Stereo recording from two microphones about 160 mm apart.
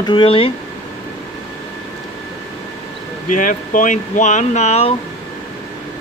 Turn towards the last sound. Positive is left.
turn(degrees=40)  # may be behind; listen again after turning